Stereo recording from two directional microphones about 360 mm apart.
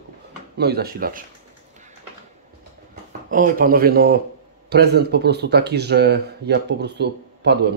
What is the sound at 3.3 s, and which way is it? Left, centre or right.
Speech, right.